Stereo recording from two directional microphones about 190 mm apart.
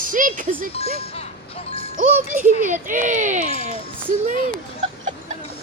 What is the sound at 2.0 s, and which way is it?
A woman's voice, 45° right (ahead or behind).